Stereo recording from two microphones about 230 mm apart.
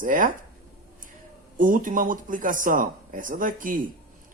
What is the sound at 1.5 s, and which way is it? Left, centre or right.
Speech, right.